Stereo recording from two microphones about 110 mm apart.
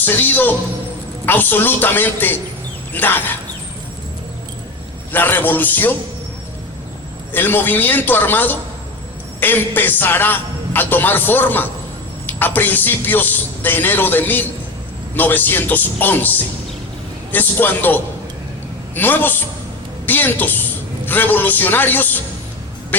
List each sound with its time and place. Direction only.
0.0 s a man's voice: 15° left (ahead or behind)
5.1 s a man's voice: 15° left (ahead or behind)
7.3 s a man's voice: 20° left (ahead or behind)
17.3 s a man's voice: 15° left (ahead or behind)